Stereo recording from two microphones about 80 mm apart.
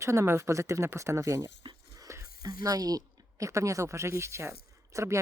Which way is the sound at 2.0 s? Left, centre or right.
Right.